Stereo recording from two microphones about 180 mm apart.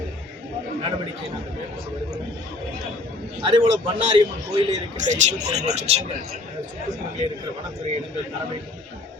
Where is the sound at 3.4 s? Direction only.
30° right (ahead or behind).